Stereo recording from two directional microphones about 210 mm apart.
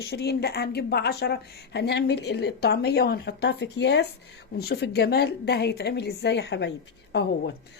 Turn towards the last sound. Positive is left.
turn(degrees=50)  # may be behind; listen again after turning